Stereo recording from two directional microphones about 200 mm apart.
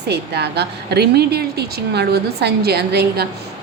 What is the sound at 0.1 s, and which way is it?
A woman's voice, 55° right (ahead or behind).